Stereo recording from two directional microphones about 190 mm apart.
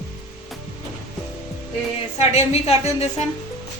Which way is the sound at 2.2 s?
35° left (ahead or behind).